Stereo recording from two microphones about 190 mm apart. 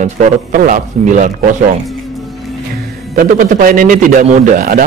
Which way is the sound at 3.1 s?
45° right (ahead or behind).